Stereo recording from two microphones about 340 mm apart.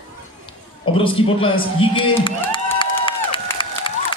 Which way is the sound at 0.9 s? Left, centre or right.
Centre.